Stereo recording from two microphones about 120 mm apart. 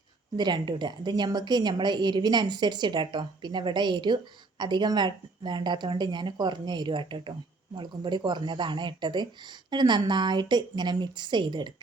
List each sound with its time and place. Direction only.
0.3 s a woman's voice: 40° right (ahead or behind)